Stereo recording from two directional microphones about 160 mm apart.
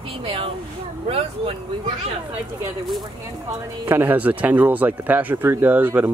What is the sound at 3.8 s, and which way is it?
Speech, 15° right (ahead or behind).